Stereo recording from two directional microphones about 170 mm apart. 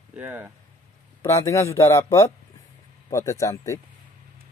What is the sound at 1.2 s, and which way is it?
A man's voice, 15° left (ahead or behind).